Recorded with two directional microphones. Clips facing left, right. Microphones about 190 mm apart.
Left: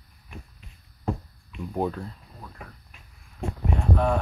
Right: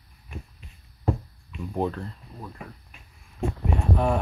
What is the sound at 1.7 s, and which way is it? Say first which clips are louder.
Speech: even; 5° left (ahead or behind).